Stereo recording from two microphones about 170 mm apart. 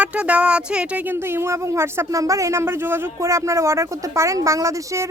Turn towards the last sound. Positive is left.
turn(degrees=-20)  # may be behind; listen again after turning